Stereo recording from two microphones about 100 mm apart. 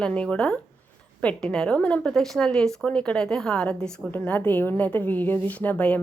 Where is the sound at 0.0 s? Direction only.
10° left (ahead or behind).